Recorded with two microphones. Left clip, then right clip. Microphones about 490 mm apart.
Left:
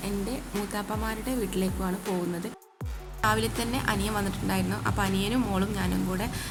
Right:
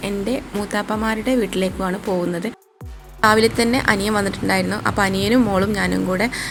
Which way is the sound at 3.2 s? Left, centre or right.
Left.